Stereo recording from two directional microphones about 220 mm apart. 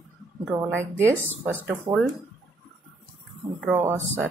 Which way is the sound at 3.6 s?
10° right (ahead or behind).